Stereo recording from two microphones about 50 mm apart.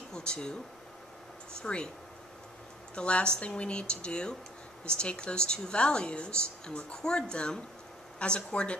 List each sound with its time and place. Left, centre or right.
0.1 s speech: centre
1.6 s speech: centre
3.0 s speech: centre